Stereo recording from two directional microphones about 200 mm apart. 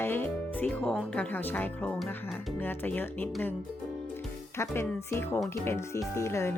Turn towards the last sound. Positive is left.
turn(degrees=15)  # may be behind; listen again after turning